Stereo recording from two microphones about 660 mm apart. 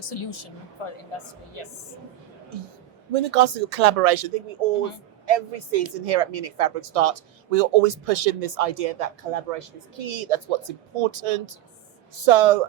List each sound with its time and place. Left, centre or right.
0.0 s a woman's voice: left
3.1 s a woman's voice: right